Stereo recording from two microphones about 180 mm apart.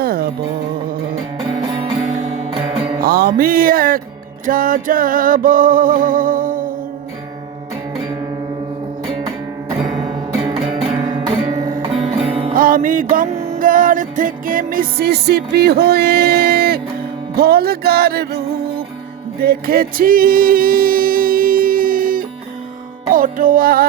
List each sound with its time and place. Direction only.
0.0 s music: 55° right (ahead or behind)
1.4 s music: 30° right (ahead or behind)
3.0 s music: 55° right (ahead or behind)
10.1 s music: 30° right (ahead or behind)
12.5 s music: 50° right (ahead or behind)
19.4 s music: 55° right (ahead or behind)